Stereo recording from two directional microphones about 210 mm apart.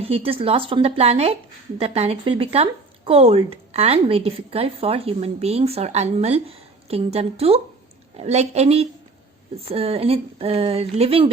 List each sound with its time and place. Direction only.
0.0 s speech: 25° right (ahead or behind)